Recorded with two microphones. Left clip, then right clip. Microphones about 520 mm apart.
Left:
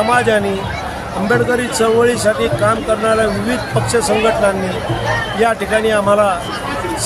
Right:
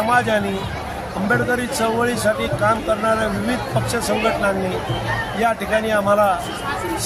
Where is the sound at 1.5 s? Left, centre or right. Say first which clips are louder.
Left 6 dB; right.